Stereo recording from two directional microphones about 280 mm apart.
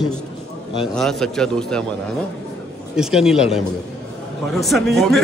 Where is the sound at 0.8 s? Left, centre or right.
Centre.